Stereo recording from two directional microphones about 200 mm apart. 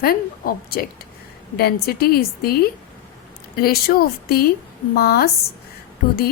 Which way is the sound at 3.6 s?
50° left (ahead or behind).